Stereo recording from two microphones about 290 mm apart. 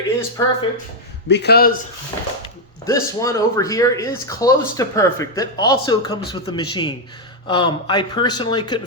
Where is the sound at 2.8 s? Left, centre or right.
Centre.